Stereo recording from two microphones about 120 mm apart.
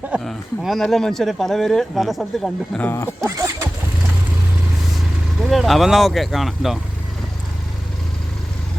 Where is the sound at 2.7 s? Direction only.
15° left (ahead or behind).